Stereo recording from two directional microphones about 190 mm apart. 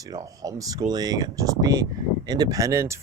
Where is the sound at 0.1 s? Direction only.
20° right (ahead or behind).